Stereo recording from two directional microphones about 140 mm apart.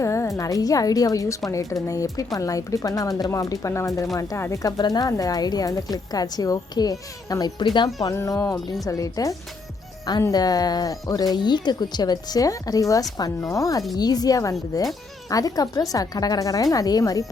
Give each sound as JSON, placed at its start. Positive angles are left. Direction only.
{"t": 0.0, "sound": "a woman's voice", "side_deg": 20}